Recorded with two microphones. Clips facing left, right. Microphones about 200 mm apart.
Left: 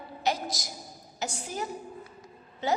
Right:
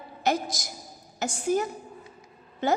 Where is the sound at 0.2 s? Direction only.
50° right (ahead or behind).